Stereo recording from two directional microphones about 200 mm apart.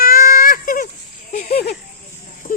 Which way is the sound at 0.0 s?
45° left (ahead or behind).